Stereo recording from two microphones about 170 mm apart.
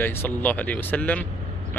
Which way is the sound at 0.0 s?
10° left (ahead or behind).